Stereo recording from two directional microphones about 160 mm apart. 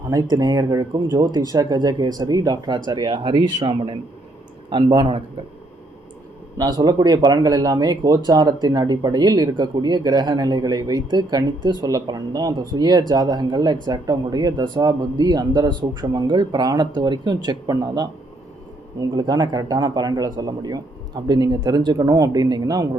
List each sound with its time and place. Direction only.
0.1 s a man's voice: 25° right (ahead or behind)
6.6 s speech: 25° right (ahead or behind)
19.1 s speech: 25° right (ahead or behind)